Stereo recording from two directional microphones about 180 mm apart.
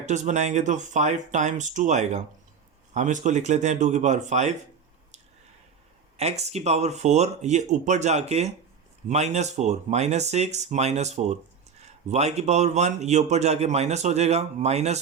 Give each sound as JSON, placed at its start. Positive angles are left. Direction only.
{"t": 0.0, "sound": "speech", "side_deg": -40}
{"t": 6.1, "sound": "speech", "side_deg": -35}